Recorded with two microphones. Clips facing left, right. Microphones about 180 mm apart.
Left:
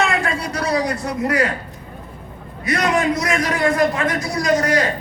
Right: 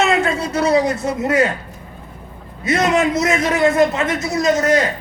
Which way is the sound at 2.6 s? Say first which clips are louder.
Right 2 dB; 25° right (ahead or behind).